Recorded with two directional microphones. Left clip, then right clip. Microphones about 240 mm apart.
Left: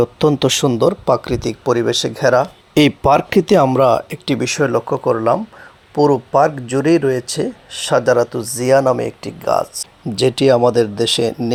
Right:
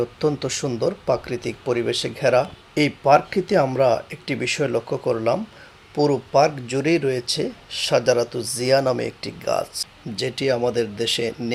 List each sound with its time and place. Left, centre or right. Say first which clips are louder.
0.0 s speech: left 8 dB; left
2.7 s speech: left 4 dB; left; by 9.6 s centre
10.2 s speech: left 10 dB; left